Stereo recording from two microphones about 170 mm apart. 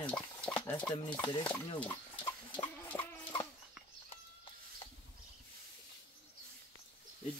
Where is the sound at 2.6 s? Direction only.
10° left (ahead or behind).